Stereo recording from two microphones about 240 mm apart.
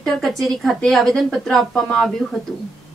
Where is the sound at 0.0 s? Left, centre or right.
Centre.